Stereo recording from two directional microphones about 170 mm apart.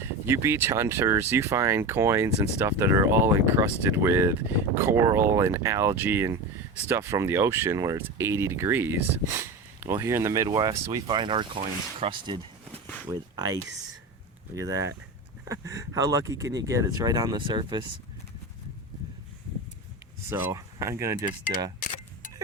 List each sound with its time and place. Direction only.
0.0 s speech: 15° right (ahead or behind)
20.3 s speech: 20° right (ahead or behind)